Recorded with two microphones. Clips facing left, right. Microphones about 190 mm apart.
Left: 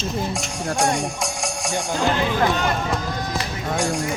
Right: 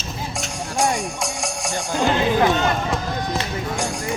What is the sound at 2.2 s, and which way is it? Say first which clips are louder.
Speech: right 3 dB; 20° right (ahead or behind).